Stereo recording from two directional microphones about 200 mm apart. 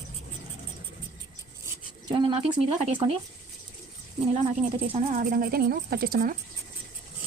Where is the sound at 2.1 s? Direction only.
25° right (ahead or behind).